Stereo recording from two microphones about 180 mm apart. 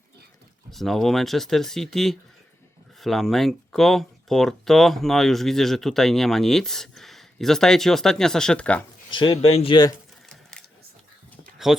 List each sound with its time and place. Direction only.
0.7 s speech: centre (ahead or behind)
9.1 s speech: 30° left (ahead or behind)
11.5 s a sound: centre (ahead or behind)